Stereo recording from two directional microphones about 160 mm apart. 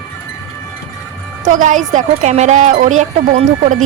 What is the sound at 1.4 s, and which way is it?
Speech, 55° right (ahead or behind).